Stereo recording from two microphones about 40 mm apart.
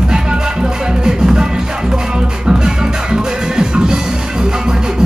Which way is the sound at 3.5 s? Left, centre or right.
Centre.